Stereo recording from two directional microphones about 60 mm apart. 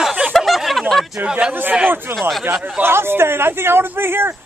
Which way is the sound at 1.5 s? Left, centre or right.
Right.